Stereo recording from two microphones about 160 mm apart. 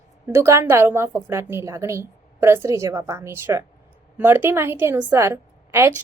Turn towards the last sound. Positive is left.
turn(degrees=-15)  # may be behind; listen again after turning